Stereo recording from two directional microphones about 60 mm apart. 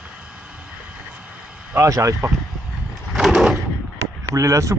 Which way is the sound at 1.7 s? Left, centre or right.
Right.